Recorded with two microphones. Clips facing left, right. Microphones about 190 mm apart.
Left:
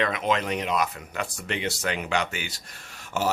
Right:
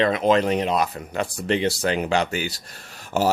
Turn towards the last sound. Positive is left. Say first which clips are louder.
# right 5 dB
turn(degrees=-35)  # may be behind; listen again after turning